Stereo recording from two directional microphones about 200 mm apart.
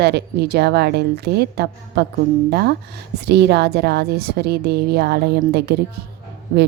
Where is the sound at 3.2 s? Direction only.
55° right (ahead or behind).